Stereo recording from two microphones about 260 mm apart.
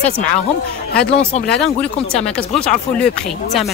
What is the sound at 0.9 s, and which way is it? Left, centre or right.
Speech, left.